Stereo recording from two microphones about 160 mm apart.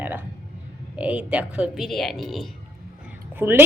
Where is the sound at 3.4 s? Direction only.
15° right (ahead or behind).